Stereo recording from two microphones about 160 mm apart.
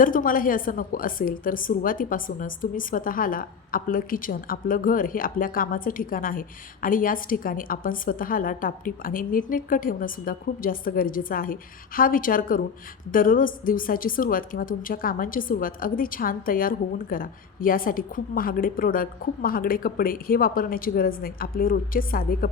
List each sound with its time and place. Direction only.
0.0 s a woman's voice: 60° left (ahead or behind)